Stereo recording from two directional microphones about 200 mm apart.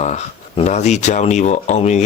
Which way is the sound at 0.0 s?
35° left (ahead or behind).